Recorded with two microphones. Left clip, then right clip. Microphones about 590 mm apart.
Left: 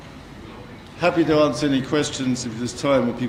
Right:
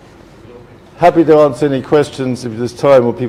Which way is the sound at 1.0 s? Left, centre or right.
Right.